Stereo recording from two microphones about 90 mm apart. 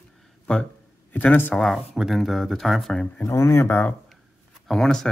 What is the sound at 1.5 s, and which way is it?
Speech, 5° left (ahead or behind).